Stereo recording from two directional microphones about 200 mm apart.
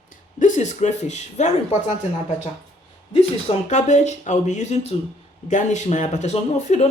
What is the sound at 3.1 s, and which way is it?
Speech, 30° left (ahead or behind).